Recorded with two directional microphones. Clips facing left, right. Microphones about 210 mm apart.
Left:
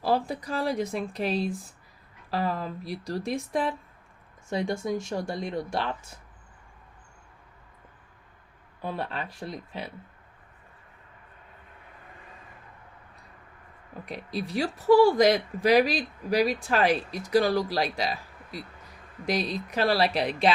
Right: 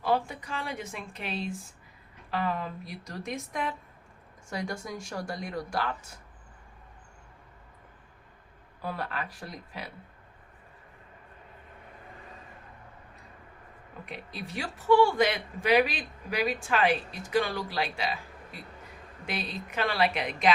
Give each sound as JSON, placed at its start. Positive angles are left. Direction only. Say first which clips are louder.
{"t": 0.0, "sound": "speech", "louder": "left 2 dB", "side_deg": 35}
{"t": 8.8, "sound": "speech", "louder": "left 2 dB", "side_deg": 25}
{"t": 14.0, "sound": "speech", "louder": "left 7 dB", "side_deg": 35}